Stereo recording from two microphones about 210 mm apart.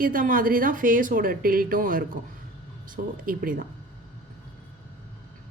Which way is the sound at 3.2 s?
40° right (ahead or behind).